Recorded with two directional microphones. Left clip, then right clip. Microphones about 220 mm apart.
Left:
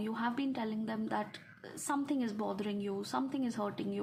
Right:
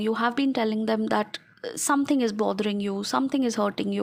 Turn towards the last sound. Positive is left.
turn(degrees=-45)  # may be behind; listen again after turning